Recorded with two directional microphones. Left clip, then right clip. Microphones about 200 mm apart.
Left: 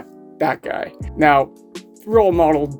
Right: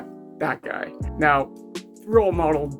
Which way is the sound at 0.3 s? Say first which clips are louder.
Left 6 dB; 45° left (ahead or behind).